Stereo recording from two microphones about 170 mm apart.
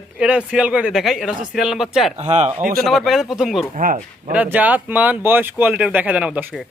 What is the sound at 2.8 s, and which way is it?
A man's voice, centre (ahead or behind).